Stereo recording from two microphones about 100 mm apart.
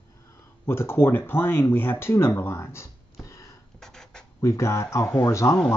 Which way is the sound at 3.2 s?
30° left (ahead or behind).